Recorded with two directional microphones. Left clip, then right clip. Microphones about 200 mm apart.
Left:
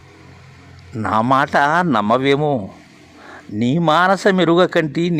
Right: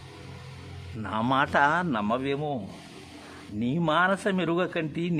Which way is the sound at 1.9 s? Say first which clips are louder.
Left 13 dB; 40° left (ahead or behind).